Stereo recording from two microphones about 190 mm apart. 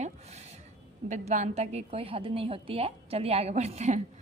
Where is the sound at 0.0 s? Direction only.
35° right (ahead or behind).